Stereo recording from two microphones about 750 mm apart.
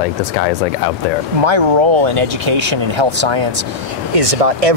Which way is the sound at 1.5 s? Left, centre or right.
Right.